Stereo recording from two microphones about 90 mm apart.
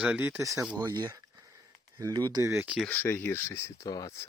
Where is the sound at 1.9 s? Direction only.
40° right (ahead or behind).